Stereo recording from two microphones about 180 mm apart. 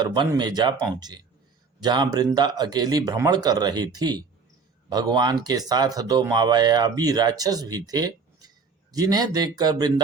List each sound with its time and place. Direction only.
0.0 s speech: 25° right (ahead or behind)